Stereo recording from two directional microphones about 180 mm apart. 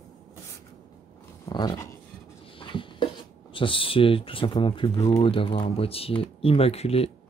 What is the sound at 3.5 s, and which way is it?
Speech, 30° left (ahead or behind).